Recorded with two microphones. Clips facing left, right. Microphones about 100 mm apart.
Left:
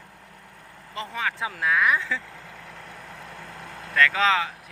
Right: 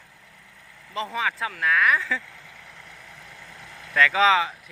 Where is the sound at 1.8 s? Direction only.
Centre (ahead or behind).